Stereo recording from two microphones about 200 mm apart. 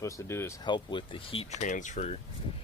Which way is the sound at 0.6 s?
25° left (ahead or behind).